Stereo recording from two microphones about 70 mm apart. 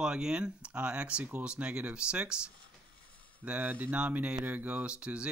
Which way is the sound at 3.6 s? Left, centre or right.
Right.